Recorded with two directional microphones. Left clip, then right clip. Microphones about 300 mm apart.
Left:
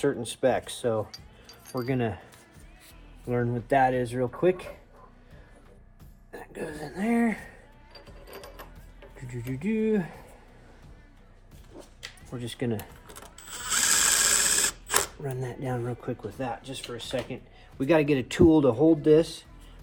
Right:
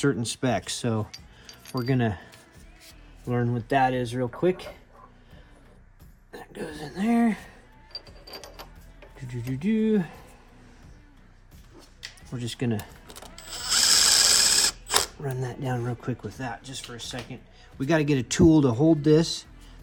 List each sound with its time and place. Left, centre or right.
0.0 s speech: right
3.2 s speech: right
6.3 s speech: right
8.3 s music: centre
9.1 s speech: right
12.0 s a sound: right
13.7 s a sound: centre
15.2 s speech: right